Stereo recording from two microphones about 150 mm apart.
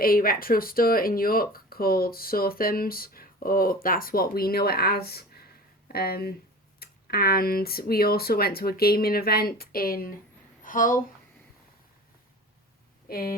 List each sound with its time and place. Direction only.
0.0 s speech: 75° left (ahead or behind)
10.6 s a woman's voice: 65° left (ahead or behind)
13.1 s speech: 90° left